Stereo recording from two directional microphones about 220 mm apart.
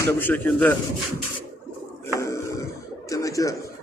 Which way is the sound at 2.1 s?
15° left (ahead or behind).